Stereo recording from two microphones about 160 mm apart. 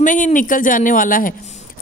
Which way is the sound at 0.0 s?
55° left (ahead or behind).